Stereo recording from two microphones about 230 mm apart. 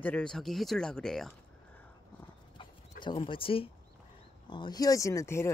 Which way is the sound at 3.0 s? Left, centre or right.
Left.